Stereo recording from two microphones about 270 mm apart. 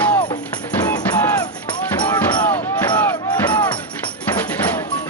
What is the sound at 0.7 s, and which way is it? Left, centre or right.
Music, centre.